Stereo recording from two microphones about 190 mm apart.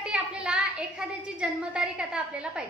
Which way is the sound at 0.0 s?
5° right (ahead or behind).